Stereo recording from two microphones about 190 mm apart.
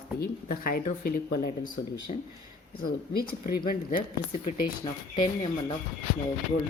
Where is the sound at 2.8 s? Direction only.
50° left (ahead or behind).